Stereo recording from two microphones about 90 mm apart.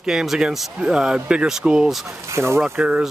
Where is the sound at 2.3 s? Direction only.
30° right (ahead or behind).